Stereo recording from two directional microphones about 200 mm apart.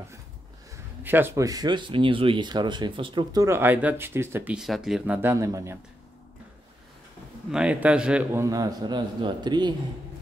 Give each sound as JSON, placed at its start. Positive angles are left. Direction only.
{"t": 1.0, "sound": "speech", "side_deg": -10}
{"t": 7.5, "sound": "speech", "side_deg": -5}